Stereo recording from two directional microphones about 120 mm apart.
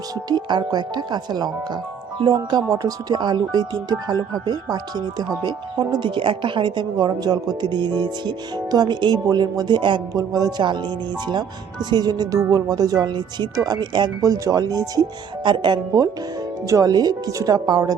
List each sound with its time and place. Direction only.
0.3 s speech: 35° right (ahead or behind)
14.2 s speech: 30° right (ahead or behind)